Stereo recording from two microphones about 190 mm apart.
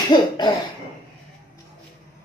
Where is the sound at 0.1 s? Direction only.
25° left (ahead or behind).